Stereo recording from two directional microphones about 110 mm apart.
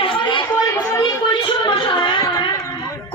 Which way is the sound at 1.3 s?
45° left (ahead or behind).